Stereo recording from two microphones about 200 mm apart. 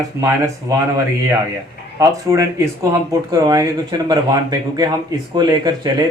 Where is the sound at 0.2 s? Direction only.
15° right (ahead or behind).